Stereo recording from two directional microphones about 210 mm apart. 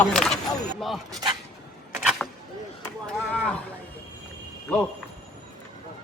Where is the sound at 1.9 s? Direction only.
5° right (ahead or behind).